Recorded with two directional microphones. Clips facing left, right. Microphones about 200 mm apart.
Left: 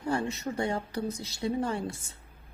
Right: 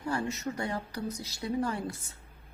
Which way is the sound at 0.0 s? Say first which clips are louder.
Left 2 dB; 25° left (ahead or behind).